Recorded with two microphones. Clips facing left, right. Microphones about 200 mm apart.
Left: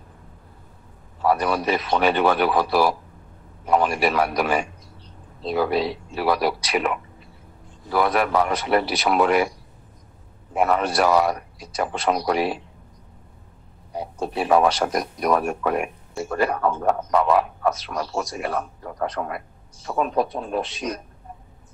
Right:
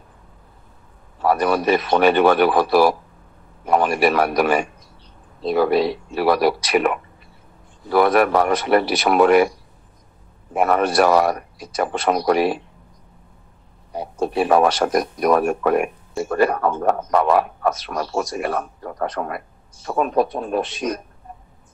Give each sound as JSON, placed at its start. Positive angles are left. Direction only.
{"t": 1.2, "sound": "speech", "side_deg": -50}
{"t": 10.5, "sound": "a man's voice", "side_deg": -50}
{"t": 13.9, "sound": "a man's voice", "side_deg": -60}